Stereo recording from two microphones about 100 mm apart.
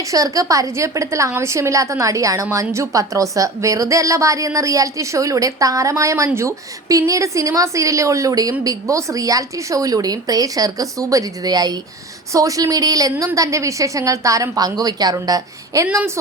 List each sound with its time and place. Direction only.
0.1 s a woman's voice: 35° right (ahead or behind)